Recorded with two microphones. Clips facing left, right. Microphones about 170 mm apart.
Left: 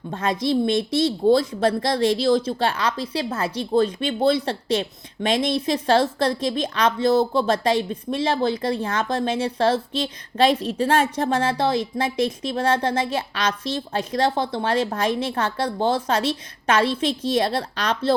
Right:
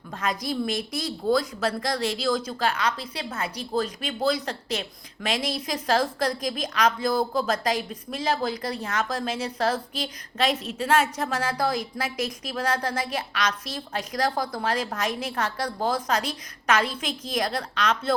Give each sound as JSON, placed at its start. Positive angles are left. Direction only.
{"t": 0.1, "sound": "speech", "side_deg": 30}